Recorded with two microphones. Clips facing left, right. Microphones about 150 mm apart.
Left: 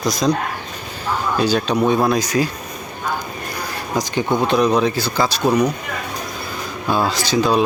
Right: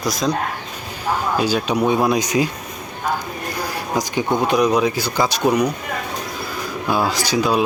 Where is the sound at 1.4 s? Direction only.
5° right (ahead or behind).